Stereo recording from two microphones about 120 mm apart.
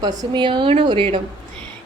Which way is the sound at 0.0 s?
35° right (ahead or behind).